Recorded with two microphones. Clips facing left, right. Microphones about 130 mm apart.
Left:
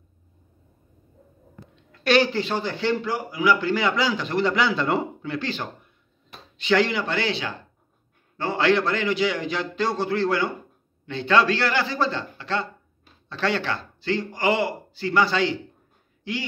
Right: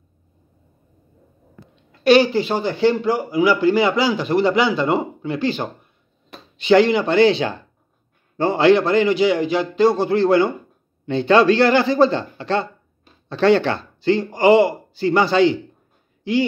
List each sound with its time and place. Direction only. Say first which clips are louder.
1.9 s a woman's voice: right 6 dB; 5° right (ahead or behind)